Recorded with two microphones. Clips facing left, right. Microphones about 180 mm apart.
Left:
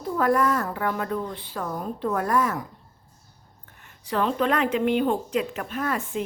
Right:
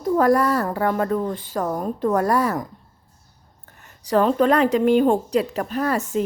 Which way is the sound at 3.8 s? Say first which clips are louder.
Right 7 dB; 40° right (ahead or behind).